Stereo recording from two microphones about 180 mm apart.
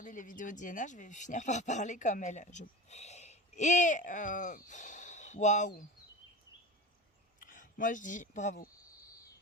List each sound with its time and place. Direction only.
0.0 s speech: 45° left (ahead or behind)
7.4 s speech: 50° left (ahead or behind)